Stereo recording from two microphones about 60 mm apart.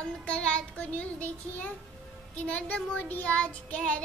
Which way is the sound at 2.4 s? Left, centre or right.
Left.